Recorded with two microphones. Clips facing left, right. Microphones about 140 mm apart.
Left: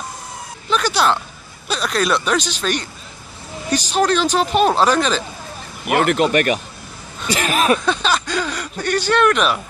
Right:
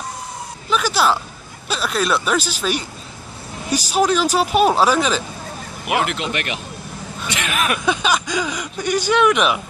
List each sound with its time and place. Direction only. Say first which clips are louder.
0.7 s a sound: even; 5° right (ahead or behind)
1.7 s speech: left 1 dB; 5° right (ahead or behind)
5.9 s speech: left 5 dB; 50° left (ahead or behind); by 7.8 s 35° left (ahead or behind)
7.8 s speech: even; 10° right (ahead or behind)